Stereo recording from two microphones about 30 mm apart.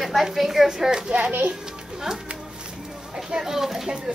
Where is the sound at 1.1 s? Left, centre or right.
Right.